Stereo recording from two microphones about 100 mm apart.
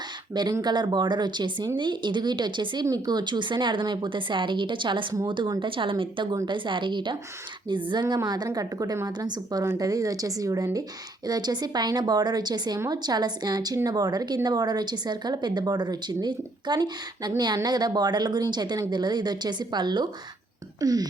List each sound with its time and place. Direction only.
0.6 s speech: 45° right (ahead or behind)